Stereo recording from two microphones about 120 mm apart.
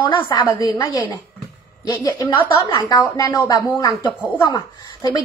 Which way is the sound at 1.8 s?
35° left (ahead or behind).